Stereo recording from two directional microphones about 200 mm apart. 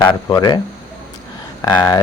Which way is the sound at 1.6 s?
20° left (ahead or behind).